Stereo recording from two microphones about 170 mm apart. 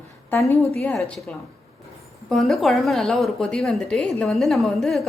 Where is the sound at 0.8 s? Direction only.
5° left (ahead or behind).